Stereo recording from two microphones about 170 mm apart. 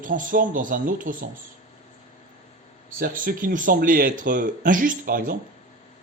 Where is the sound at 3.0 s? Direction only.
55° right (ahead or behind).